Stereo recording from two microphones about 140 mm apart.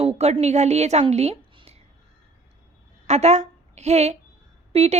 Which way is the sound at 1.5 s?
50° right (ahead or behind).